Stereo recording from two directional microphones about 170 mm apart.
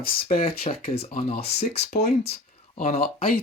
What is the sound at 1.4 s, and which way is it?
Speech, 75° left (ahead or behind).